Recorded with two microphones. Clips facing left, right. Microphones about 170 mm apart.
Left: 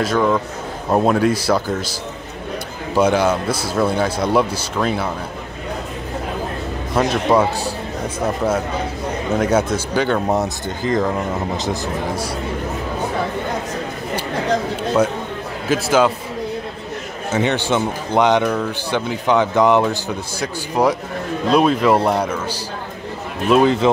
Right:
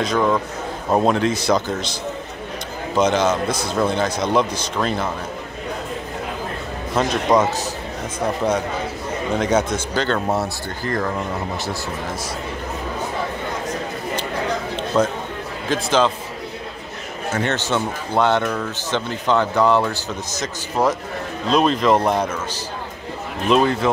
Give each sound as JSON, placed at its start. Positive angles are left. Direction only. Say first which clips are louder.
{"t": 0.0, "sound": "a man's voice", "louder": "left 2 dB", "side_deg": 0}
{"t": 2.9, "sound": "speech", "louder": "left 2 dB", "side_deg": 10}
{"t": 7.0, "sound": "speech", "louder": "left 2 dB", "side_deg": 5}
{"t": 9.4, "sound": "speech", "louder": "left 2 dB", "side_deg": 5}
{"t": 15.7, "sound": "speech", "louder": "left 3 dB", "side_deg": 10}
{"t": 17.3, "sound": "speech", "louder": "left 3 dB", "side_deg": 15}
{"t": 23.6, "sound": "speech", "louder": "left 4 dB", "side_deg": 20}